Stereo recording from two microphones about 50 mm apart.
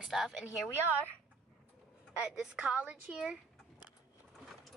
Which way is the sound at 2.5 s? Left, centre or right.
Right.